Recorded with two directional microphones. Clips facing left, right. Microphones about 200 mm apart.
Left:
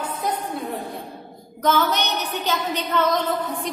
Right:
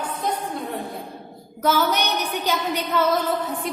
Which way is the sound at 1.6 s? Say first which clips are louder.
Even; 10° right (ahead or behind).